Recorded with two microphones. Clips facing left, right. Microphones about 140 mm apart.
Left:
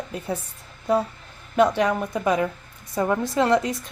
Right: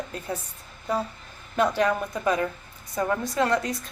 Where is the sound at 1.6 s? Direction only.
20° left (ahead or behind).